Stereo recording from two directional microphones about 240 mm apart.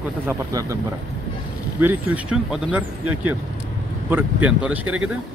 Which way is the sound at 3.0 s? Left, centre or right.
Right.